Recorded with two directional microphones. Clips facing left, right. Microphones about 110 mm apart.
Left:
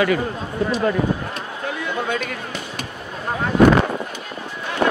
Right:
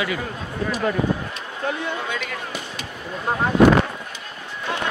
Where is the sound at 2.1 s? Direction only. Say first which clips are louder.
Left 3 dB; 50° left (ahead or behind).